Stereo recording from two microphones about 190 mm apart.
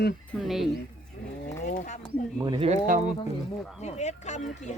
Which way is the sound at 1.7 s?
40° left (ahead or behind).